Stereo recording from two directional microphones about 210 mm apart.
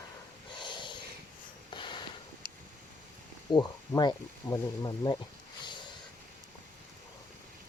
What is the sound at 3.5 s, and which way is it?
Speech, 20° left (ahead or behind).